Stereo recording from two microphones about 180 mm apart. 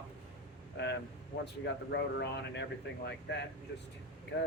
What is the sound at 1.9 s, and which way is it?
Speech, 65° left (ahead or behind).